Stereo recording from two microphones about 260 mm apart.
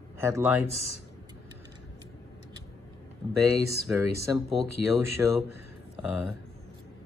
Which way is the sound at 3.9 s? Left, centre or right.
Centre.